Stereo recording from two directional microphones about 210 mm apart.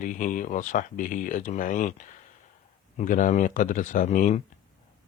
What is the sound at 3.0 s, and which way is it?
Speech, 40° left (ahead or behind).